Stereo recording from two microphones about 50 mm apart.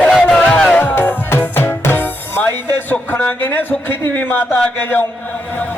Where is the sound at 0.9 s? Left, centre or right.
Left.